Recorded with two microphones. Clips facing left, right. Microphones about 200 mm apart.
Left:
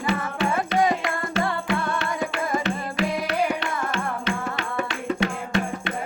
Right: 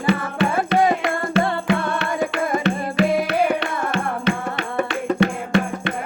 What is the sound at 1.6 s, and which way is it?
Music, 60° right (ahead or behind).